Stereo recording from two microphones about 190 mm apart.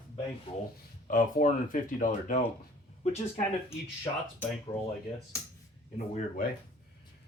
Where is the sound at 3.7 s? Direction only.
15° left (ahead or behind).